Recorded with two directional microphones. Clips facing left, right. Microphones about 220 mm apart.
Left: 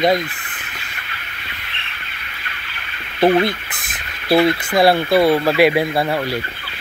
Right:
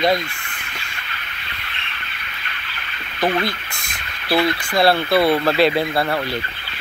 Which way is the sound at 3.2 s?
25° left (ahead or behind).